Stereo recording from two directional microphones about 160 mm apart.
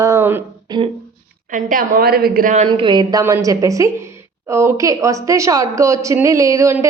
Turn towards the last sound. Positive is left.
turn(degrees=-20)  # may be behind; listen again after turning